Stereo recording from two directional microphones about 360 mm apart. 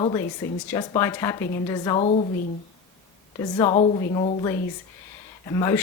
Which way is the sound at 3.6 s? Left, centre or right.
Centre.